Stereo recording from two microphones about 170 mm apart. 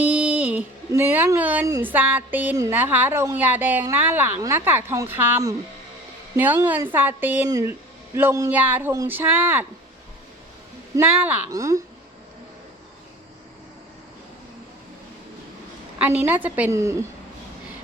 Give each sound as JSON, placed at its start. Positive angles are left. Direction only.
{"t": 0.0, "sound": "a sound", "side_deg": -5}
{"t": 1.6, "sound": "speech", "side_deg": -15}
{"t": 11.1, "sound": "speech", "side_deg": -10}
{"t": 16.0, "sound": "speech", "side_deg": -10}